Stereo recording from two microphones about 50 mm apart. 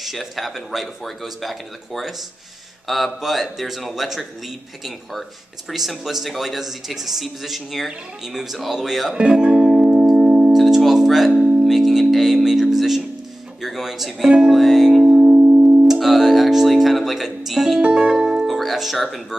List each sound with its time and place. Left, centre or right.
0.0 s a man's voice: centre
5.7 s a man's voice: centre
9.1 s music: centre
10.5 s music: centre
15.0 s music: centre
15.9 s music: centre
17.8 s music: right
18.5 s music: centre